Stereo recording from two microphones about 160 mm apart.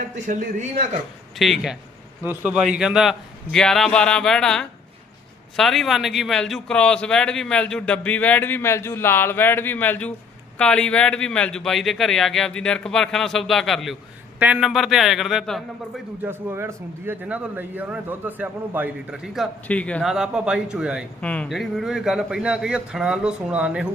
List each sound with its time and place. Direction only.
0.0 s a man's voice: 50° right (ahead or behind)
1.4 s a man's voice: centre (ahead or behind)
16.2 s speech: 15° right (ahead or behind)
19.6 s a man's voice: 10° left (ahead or behind)
20.1 s speech: 5° right (ahead or behind)
21.2 s speech: 5° left (ahead or behind)